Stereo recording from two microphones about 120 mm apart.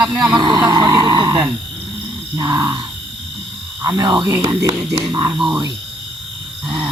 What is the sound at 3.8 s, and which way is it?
Speech, 35° right (ahead or behind).